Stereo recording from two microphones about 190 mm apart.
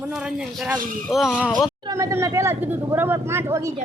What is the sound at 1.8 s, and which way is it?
Speech, 15° right (ahead or behind).